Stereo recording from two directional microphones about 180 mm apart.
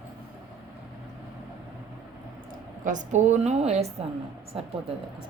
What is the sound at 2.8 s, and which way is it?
A woman's voice, 45° right (ahead or behind).